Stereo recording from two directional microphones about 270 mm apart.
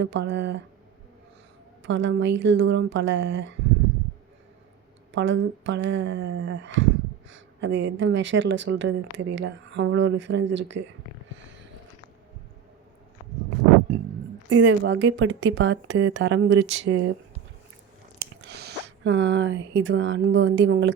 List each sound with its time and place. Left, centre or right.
0.0 s speech: right
1.9 s speech: right
5.1 s speech: right
14.5 s speech: right
18.2 s speech: right